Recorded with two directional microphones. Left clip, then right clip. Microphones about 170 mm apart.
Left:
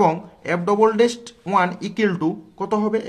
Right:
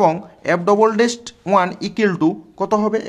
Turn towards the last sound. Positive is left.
turn(degrees=-30)  # may be behind; listen again after turning